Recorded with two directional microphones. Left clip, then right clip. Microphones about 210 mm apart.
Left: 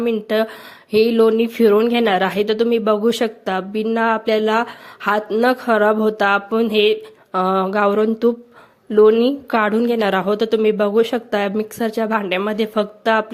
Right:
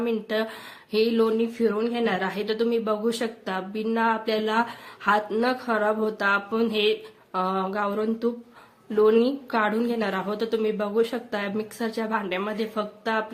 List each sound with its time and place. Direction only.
0.0 s speech: 30° left (ahead or behind)